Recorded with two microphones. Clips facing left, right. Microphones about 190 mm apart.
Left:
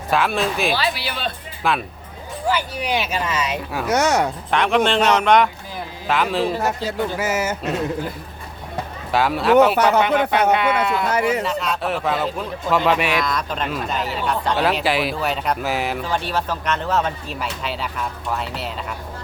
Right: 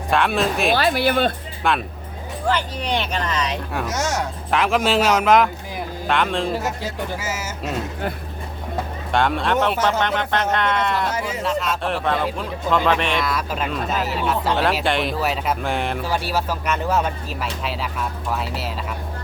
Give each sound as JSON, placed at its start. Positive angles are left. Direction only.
{"t": 0.1, "sound": "speech", "side_deg": 0}
{"t": 0.7, "sound": "speech", "side_deg": -50}
{"t": 1.6, "sound": "speech", "side_deg": 0}
{"t": 3.8, "sound": "speech", "side_deg": 65}
{"t": 4.5, "sound": "speech", "side_deg": -5}
{"t": 7.2, "sound": "speech", "side_deg": 60}
{"t": 9.1, "sound": "speech", "side_deg": 5}
{"t": 11.1, "sound": "speech", "side_deg": 65}
{"t": 11.4, "sound": "speech", "side_deg": 0}
{"t": 13.2, "sound": "speech", "side_deg": -5}
{"t": 16.0, "sound": "speech", "side_deg": -5}